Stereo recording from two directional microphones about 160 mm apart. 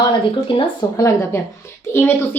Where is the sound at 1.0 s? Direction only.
20° left (ahead or behind).